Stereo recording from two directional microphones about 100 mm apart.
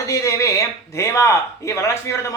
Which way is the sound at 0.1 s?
30° left (ahead or behind).